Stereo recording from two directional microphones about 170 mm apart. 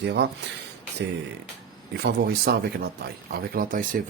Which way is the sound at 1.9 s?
70° right (ahead or behind).